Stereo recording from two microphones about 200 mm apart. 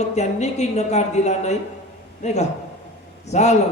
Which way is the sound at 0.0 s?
35° left (ahead or behind).